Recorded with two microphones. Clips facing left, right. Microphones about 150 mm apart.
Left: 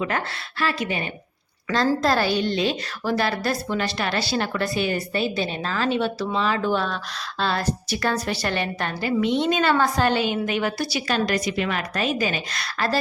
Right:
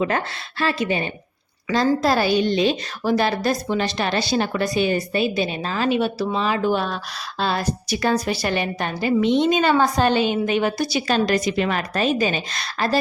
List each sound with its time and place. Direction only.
0.6 s a woman's voice: 25° right (ahead or behind)
2.0 s a woman's voice: 10° right (ahead or behind)